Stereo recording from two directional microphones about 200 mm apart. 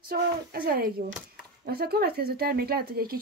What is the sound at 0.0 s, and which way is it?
Speech, 50° right (ahead or behind).